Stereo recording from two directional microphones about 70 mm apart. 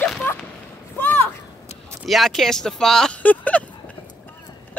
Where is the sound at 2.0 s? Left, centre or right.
Centre.